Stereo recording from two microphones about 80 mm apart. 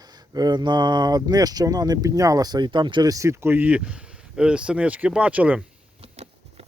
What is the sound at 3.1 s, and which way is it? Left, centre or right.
Speech, right.